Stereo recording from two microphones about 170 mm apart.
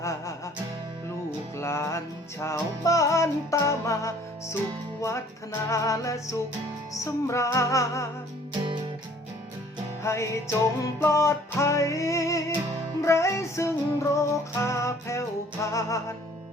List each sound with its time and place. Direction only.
0.0 s music: 15° left (ahead or behind)
1.5 s music: 15° left (ahead or behind)
10.0 s music: 15° left (ahead or behind)